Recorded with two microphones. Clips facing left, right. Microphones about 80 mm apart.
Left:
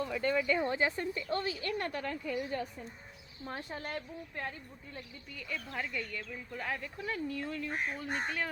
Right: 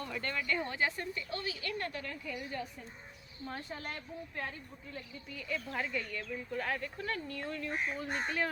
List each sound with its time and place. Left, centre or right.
0.0 s speech: centre; by 1.2 s left
1.3 s a woman's voice: left
5.3 s speech: centre